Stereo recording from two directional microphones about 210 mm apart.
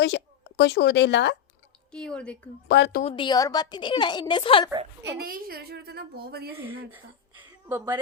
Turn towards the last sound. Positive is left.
turn(degrees=-10)  # may be behind; listen again after turning